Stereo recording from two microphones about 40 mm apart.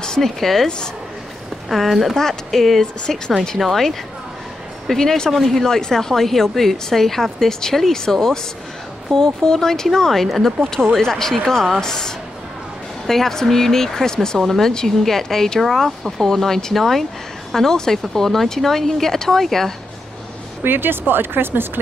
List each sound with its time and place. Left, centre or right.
0.2 s a woman's voice: centre
1.7 s a woman's voice: centre
2.8 s a woman's voice: centre
3.5 s a woman's voice: centre
5.3 s a woman's voice: centre
14.4 s a woman's voice: centre
20.6 s speech: right